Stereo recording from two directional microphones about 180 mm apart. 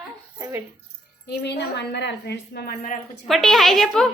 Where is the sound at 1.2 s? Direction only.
65° left (ahead or behind); by 3.3 s 45° left (ahead or behind).